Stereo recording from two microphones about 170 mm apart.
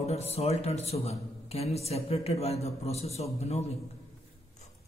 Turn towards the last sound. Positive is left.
turn(degrees=40)  # may be behind; listen again after turning